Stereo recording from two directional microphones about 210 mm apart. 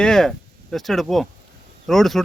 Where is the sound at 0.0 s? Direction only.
5° left (ahead or behind).